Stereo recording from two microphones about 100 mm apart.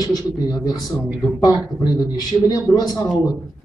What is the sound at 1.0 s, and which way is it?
Speech, 15° right (ahead or behind).